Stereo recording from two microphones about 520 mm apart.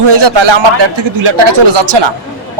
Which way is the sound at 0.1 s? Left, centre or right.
Right.